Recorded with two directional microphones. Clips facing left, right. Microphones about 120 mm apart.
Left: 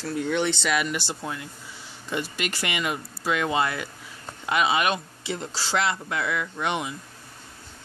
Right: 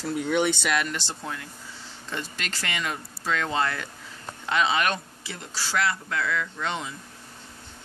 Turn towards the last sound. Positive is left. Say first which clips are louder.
# left 3 dB
turn(degrees=15)  # may be behind; listen again after turning